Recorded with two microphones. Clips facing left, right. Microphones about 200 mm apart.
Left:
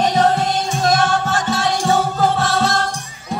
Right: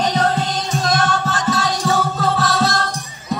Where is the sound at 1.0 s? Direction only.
30° left (ahead or behind).